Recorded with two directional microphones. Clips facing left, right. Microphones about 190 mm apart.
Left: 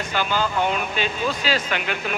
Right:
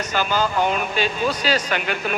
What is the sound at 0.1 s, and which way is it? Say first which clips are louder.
Speech: right 2 dB; 45° right (ahead or behind).